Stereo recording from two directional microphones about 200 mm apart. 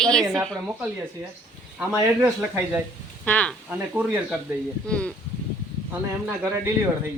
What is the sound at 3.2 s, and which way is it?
Speech, 5° left (ahead or behind).